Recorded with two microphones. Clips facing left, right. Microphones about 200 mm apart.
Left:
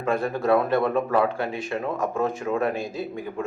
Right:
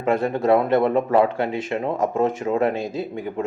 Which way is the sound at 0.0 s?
20° right (ahead or behind).